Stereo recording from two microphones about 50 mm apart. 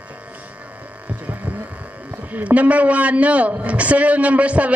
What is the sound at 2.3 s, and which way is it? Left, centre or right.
A man's voice, right.